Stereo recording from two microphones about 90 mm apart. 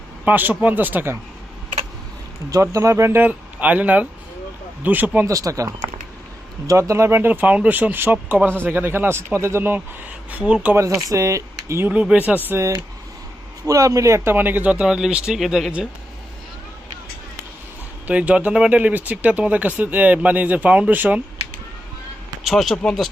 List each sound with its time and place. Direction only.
0.3 s speech: 20° right (ahead or behind)
2.5 s speech: 35° right (ahead or behind)
3.2 s speech: 15° right (ahead or behind)
5.2 s speech: 35° right (ahead or behind)
10.3 s speech: 15° right (ahead or behind)
10.8 s speech: 35° right (ahead or behind)
11.9 s speech: 15° right (ahead or behind)
12.5 s speech: 30° right (ahead or behind); by 15.9 s 5° right (ahead or behind)
18.1 s speech: 15° right (ahead or behind)
22.4 s speech: centre (ahead or behind)